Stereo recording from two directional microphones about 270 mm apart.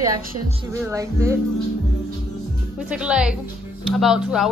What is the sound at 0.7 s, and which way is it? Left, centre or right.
Speech, centre.